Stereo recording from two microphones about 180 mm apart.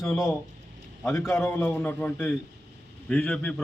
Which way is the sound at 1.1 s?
15° left (ahead or behind).